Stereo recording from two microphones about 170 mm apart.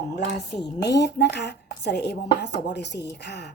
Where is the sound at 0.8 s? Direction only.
85° left.